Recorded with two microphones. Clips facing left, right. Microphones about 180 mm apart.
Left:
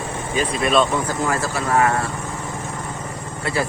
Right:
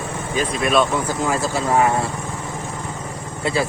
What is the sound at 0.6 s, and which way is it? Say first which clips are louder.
Speech: even; centre (ahead or behind).